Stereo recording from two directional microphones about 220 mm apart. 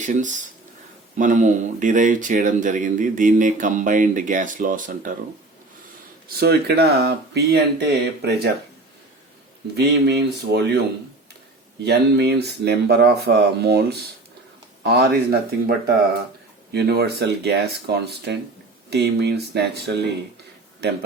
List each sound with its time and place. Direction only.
0.0 s speech: 35° right (ahead or behind)
6.2 s speech: 45° right (ahead or behind)
9.7 s speech: 45° right (ahead or behind)
11.9 s speech: 50° right (ahead or behind)
16.7 s speech: 50° right (ahead or behind)